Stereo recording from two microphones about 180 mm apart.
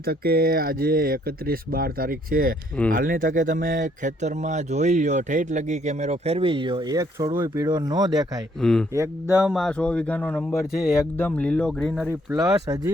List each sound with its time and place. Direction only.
0.0 s speech: 60° right (ahead or behind); by 8.3 s 25° right (ahead or behind)
8.6 s speech: 5° left (ahead or behind)
8.9 s speech: 15° right (ahead or behind)
9.5 s speech: 5° left (ahead or behind)
12.4 s speech: 20° right (ahead or behind)